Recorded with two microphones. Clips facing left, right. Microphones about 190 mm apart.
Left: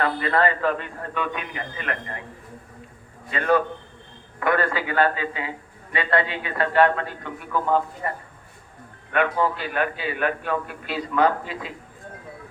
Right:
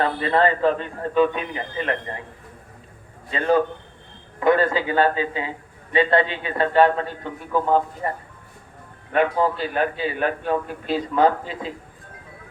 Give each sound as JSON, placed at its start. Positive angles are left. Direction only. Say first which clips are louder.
{"t": 0.0, "sound": "a man's voice", "louder": "right 2 dB", "side_deg": -25}
{"t": 3.2, "sound": "a man's voice", "louder": "right 2 dB", "side_deg": -30}
{"t": 8.0, "sound": "a man's voice", "louder": "right 2 dB", "side_deg": -30}